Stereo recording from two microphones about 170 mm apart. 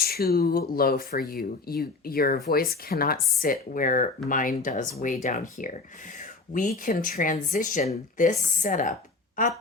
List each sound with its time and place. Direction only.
0.0 s speech: 65° left (ahead or behind)